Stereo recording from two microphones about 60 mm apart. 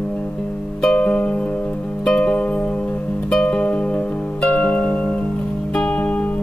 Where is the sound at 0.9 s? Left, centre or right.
Left.